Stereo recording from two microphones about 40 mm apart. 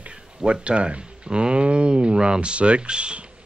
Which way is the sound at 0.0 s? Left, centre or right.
Right.